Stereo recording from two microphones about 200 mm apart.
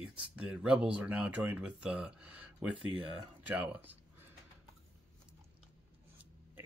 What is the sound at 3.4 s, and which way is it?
Speech, 10° right (ahead or behind).